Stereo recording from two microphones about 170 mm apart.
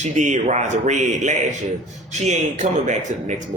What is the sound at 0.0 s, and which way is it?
A man's voice, 45° right (ahead or behind).